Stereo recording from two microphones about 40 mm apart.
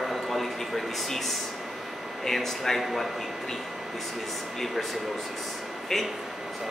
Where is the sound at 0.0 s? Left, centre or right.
Centre.